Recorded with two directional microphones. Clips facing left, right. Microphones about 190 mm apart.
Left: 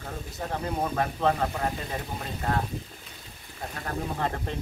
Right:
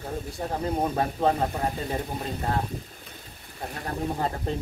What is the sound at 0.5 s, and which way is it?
Speech, 25° right (ahead or behind).